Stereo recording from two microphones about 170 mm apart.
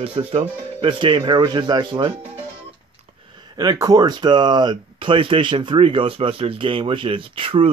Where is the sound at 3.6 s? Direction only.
25° right (ahead or behind).